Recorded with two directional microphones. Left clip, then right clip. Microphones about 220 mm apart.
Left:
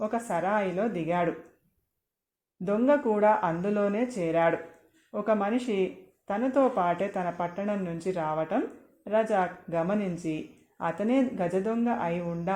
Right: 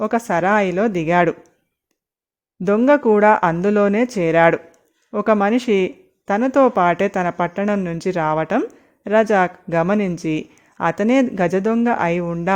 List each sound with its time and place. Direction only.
0.0 s speech: 45° right (ahead or behind)
2.6 s speech: 45° right (ahead or behind)